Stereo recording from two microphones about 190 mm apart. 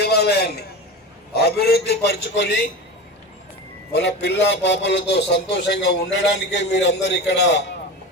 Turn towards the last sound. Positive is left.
turn(degrees=65)  # may be behind; listen again after turning